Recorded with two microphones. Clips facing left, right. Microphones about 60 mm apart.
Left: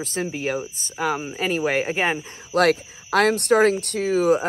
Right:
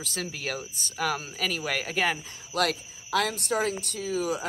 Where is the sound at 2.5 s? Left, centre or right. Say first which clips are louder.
Left 9 dB; left.